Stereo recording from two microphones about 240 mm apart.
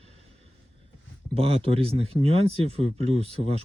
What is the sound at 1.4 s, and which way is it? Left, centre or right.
Speech, right.